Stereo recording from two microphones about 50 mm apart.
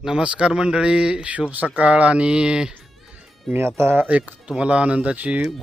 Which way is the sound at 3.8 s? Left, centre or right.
Right.